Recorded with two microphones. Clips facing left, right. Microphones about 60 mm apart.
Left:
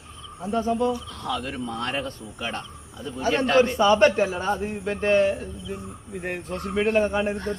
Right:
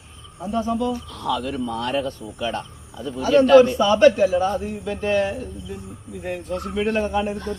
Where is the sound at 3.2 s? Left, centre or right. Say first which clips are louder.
Right 7 dB; left.